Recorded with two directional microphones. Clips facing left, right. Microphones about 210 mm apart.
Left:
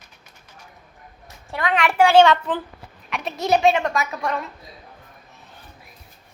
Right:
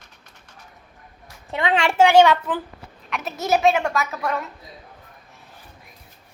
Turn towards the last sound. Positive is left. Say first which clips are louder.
# even
turn(degrees=-5)  # may be behind; listen again after turning